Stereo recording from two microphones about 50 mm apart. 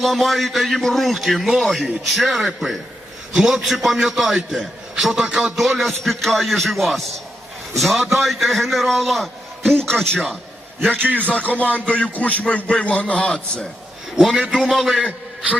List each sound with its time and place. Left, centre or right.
0.0 s a man's voice: centre
9.7 s speech: centre
11.0 s speech: right
11.3 s speech: left
14.2 s a man's voice: centre